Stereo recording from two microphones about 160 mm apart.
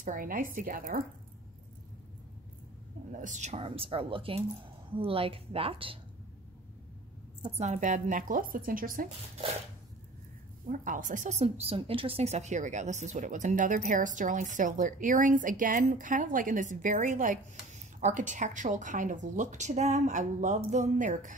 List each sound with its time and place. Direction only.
0.0 s speech: 55° right (ahead or behind)
3.1 s speech: 50° right (ahead or behind); by 5.9 s 35° right (ahead or behind)
7.5 s speech: 45° right (ahead or behind)
10.7 s a woman's voice: 55° right (ahead or behind)